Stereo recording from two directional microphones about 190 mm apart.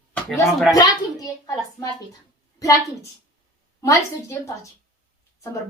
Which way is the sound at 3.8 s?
15° left (ahead or behind).